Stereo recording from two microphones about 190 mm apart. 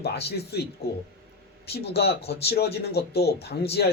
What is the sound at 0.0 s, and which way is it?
Speech, 60° left (ahead or behind).